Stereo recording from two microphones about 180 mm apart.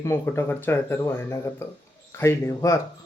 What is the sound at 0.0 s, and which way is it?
Speech, 15° left (ahead or behind).